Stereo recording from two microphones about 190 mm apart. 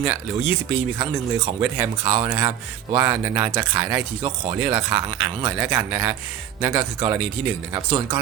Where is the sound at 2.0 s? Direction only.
25° right (ahead or behind).